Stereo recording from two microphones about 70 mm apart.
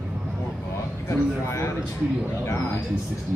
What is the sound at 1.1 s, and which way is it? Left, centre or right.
Speech, left.